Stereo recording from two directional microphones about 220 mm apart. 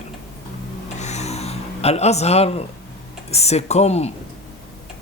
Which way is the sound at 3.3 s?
30° left (ahead or behind).